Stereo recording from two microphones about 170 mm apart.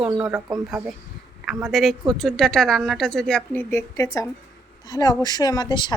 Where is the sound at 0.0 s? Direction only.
5° right (ahead or behind).